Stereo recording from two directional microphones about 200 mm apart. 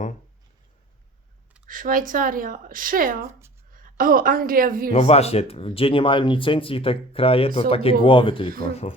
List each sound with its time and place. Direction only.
1.6 s a woman's voice: 45° right (ahead or behind)
4.9 s speech: 30° left (ahead or behind)